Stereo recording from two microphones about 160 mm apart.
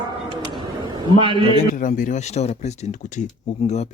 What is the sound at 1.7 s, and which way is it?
Speech, 55° left (ahead or behind).